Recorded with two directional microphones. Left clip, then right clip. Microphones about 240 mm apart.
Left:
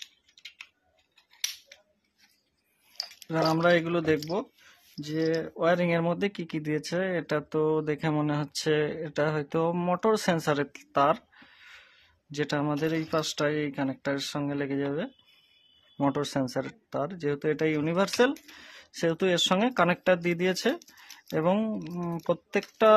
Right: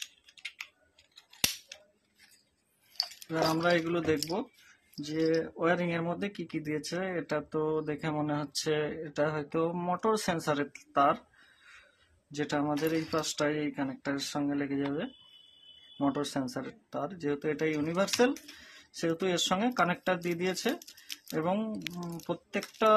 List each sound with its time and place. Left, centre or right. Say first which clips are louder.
3.2 s speech: left 5 dB; left
12.3 s speech: left 2 dB; left
16.0 s speech: left 4 dB; left